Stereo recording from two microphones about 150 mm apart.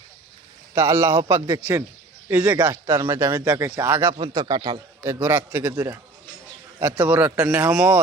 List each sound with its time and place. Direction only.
0.7 s a man's voice: 20° right (ahead or behind)
2.8 s a man's voice: 25° right (ahead or behind)
4.2 s speech: 25° right (ahead or behind)
5.0 s a man's voice: 15° right (ahead or behind)